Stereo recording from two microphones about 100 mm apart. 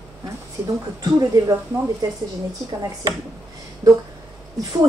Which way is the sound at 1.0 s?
35° right (ahead or behind).